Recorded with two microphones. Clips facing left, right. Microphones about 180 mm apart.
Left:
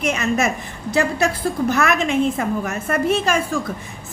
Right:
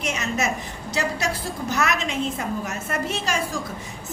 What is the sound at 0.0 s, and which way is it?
A woman's voice, 55° left (ahead or behind).